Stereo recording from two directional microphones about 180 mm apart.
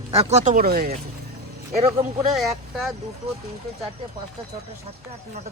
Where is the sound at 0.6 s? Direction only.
60° right (ahead or behind).